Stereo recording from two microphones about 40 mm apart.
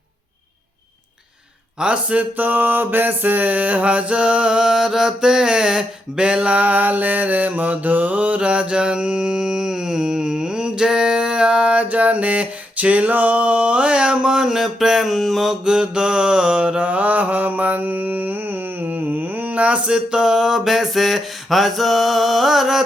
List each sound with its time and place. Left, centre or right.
1.8 s speech: right
2.4 s mantra: right
6.6 s mantra: right; by 15.5 s centre
15.6 s mantra: centre
16.8 s mantra: right
19.9 s a sound: right; by 22.8 s centre